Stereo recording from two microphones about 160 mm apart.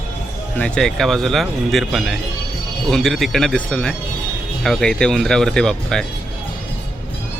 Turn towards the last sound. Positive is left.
turn(degrees=5)  # may be behind; listen again after turning